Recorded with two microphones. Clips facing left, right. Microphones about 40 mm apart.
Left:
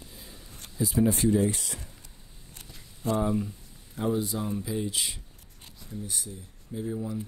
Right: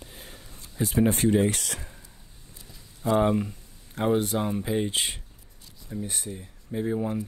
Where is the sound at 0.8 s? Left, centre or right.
Right.